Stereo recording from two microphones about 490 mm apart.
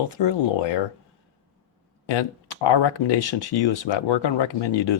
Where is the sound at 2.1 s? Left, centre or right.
Left.